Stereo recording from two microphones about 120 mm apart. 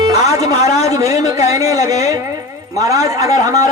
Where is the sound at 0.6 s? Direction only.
65° left (ahead or behind).